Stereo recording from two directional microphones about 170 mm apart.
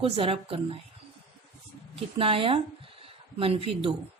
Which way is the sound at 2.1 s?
30° right (ahead or behind).